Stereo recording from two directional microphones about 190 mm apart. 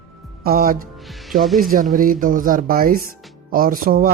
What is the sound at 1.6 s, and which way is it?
Speech, 45° right (ahead or behind).